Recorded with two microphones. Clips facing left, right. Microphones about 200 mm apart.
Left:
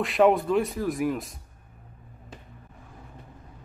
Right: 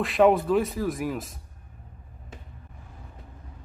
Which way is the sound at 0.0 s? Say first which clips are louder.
Right 1 dB; centre (ahead or behind).